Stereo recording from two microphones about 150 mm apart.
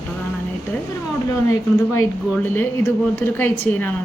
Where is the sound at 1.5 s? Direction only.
20° left (ahead or behind).